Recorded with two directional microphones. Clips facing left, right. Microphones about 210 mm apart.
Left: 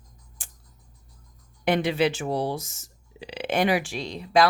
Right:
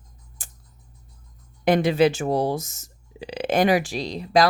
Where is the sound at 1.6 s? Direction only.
40° right (ahead or behind).